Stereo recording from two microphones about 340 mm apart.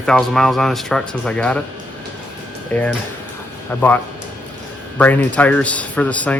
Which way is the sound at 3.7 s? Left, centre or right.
Centre.